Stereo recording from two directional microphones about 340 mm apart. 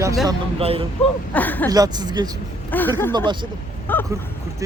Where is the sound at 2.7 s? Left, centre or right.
Centre.